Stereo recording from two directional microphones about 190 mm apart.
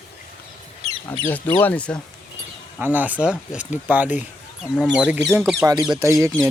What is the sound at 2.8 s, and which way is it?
Speech, 10° right (ahead or behind).